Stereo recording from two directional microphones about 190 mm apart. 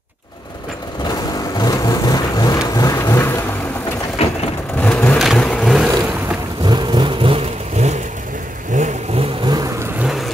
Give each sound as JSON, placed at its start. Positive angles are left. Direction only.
{"t": 1.6, "sound": "vehicle", "side_deg": 20}
{"t": 4.2, "sound": "vehicle", "side_deg": 30}
{"t": 4.8, "sound": "vehicle", "side_deg": 10}
{"t": 6.6, "sound": "vehicle", "side_deg": -20}